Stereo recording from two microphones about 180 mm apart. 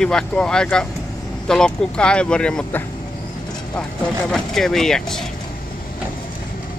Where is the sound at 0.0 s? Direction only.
5° left (ahead or behind).